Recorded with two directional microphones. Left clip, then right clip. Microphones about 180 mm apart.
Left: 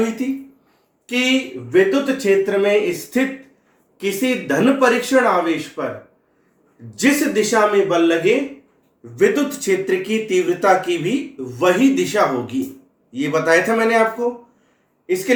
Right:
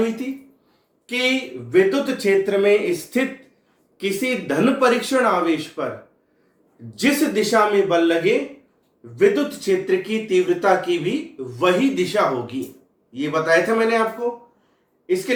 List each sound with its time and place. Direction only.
1.0 s speech: 10° left (ahead or behind); by 5.9 s 5° right (ahead or behind)
7.0 s a man's voice: centre (ahead or behind); by 14.0 s 25° left (ahead or behind)